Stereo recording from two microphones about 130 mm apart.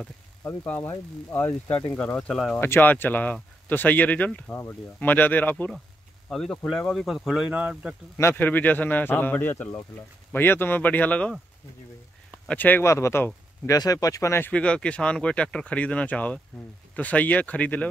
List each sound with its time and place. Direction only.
0.4 s speech: 15° left (ahead or behind); by 7.9 s 10° right (ahead or behind)
8.2 s speech: 15° left (ahead or behind)
12.4 s speech: 15° left (ahead or behind)